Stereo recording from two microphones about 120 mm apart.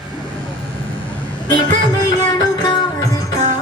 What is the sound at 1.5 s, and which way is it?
Music, 35° left (ahead or behind).